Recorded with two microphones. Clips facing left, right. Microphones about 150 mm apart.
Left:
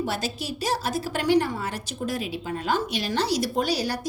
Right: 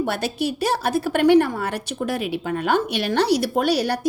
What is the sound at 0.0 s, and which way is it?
A woman's voice, 60° right (ahead or behind).